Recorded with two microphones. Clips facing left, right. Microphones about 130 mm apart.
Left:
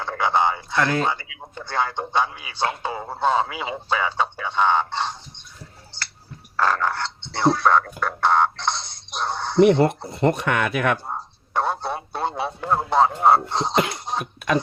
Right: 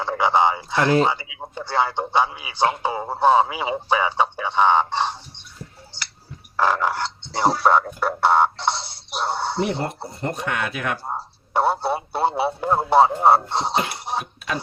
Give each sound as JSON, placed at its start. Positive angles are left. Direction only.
{"t": 0.0, "sound": "speech", "side_deg": -10}
{"t": 6.6, "sound": "speech", "side_deg": -15}
{"t": 9.6, "sound": "speech", "side_deg": 90}
{"t": 10.1, "sound": "speech", "side_deg": 70}
{"t": 11.5, "sound": "speech", "side_deg": -10}